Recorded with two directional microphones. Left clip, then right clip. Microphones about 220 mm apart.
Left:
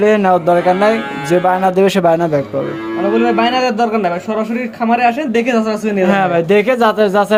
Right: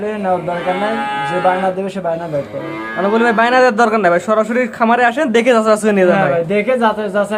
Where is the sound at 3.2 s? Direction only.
15° right (ahead or behind).